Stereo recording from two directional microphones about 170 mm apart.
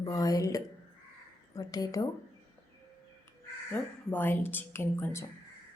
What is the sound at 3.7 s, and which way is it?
A woman's voice, 10° left (ahead or behind).